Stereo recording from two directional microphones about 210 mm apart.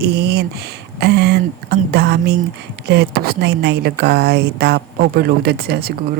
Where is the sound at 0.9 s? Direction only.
50° right (ahead or behind).